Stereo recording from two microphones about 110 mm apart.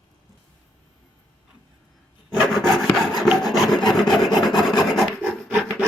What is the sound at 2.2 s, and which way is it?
Rub, centre (ahead or behind).